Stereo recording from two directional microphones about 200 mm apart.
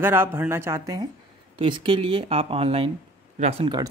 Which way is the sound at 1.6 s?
25° right (ahead or behind).